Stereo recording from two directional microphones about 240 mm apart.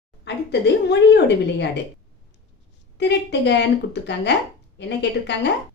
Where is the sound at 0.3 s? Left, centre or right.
Left.